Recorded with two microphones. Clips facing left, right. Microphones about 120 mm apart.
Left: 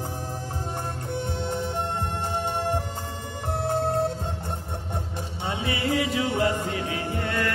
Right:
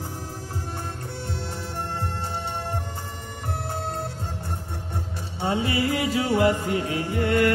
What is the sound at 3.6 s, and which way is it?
Music, 15° left (ahead or behind).